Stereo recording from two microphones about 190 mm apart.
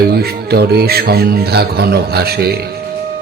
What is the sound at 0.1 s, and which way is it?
Speech, 55° right (ahead or behind).